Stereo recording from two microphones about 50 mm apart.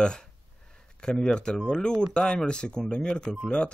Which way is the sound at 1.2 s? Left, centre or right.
Centre.